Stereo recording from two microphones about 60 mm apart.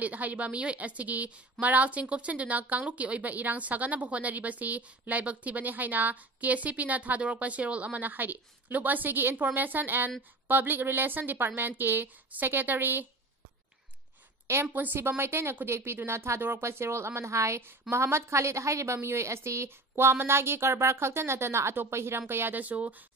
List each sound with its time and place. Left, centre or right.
0.0 s a woman's voice: right
14.7 s a woman's voice: right
17.6 s a woman's voice: right